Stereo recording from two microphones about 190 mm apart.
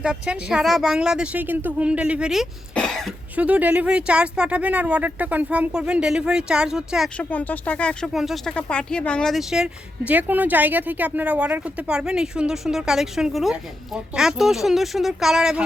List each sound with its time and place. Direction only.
0.0 s speech: 5° right (ahead or behind)
7.3 s speech: 10° left (ahead or behind)